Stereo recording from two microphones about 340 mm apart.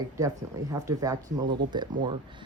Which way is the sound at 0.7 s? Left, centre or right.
Centre.